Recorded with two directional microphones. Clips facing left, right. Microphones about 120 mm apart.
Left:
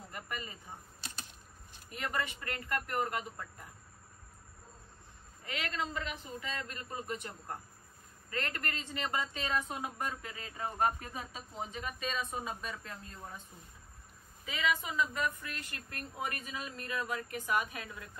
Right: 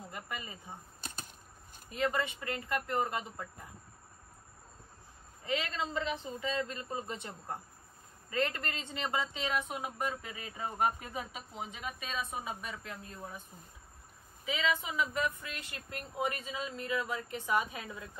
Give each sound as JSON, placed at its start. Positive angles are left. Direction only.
{"t": 0.1, "sound": "a sound", "side_deg": -20}
{"t": 2.0, "sound": "speech", "side_deg": -20}
{"t": 5.4, "sound": "speech", "side_deg": -25}
{"t": 14.4, "sound": "speech", "side_deg": -15}